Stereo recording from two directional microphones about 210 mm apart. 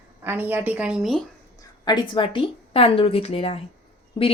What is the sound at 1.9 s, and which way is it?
Speech, 20° left (ahead or behind).